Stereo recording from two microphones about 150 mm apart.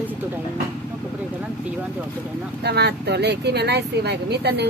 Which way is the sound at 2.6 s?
90° right.